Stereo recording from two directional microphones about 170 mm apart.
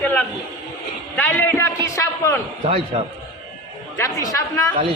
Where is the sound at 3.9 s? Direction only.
20° left (ahead or behind).